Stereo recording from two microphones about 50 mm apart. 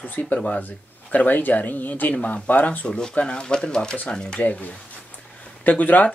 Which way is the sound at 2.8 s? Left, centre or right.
Centre.